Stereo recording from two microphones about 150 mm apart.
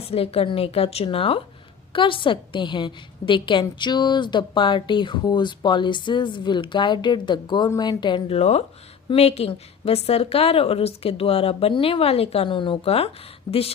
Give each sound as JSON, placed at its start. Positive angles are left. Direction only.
{"t": 0.0, "sound": "a woman's voice", "side_deg": 40}
{"t": 8.4, "sound": "a woman's voice", "side_deg": 45}